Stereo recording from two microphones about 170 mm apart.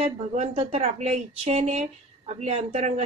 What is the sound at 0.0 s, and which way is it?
Speech, 35° right (ahead or behind).